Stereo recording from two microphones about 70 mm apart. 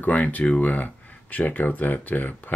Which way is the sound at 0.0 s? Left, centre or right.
Left.